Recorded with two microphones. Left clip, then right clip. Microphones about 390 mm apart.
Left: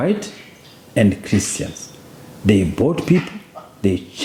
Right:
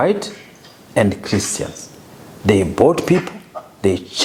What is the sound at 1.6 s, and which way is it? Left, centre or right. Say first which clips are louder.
Speech: right 3 dB; right.